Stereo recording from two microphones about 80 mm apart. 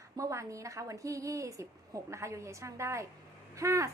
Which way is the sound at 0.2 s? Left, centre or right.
Right.